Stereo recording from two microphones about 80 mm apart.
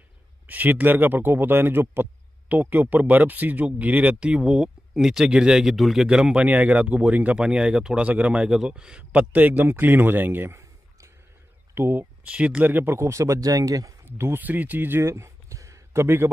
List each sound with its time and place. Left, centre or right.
0.5 s speech: right
11.7 s a sound: right
12.3 s speech: centre; by 13.9 s right
14.0 s speech: right